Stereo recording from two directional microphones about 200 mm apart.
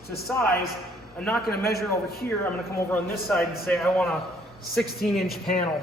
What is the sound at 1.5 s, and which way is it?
Speech, 50° left (ahead or behind).